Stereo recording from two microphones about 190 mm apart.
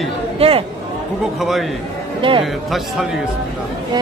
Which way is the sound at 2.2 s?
25° right (ahead or behind).